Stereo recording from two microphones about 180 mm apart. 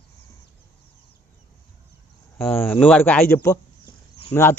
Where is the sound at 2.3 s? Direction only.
10° left (ahead or behind).